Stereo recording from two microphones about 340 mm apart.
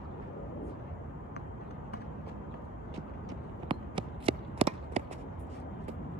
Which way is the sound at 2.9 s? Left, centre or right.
Centre.